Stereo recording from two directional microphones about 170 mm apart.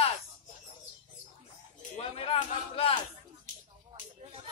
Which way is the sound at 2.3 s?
35° left (ahead or behind).